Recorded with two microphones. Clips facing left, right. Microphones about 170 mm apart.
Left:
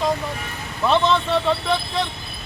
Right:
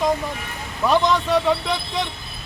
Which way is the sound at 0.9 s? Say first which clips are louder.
Even; 15° right (ahead or behind).